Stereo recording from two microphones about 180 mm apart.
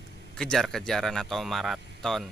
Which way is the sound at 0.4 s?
5° left (ahead or behind).